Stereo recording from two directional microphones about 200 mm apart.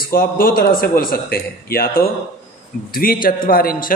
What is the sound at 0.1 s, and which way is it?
A man's voice, 45° left (ahead or behind).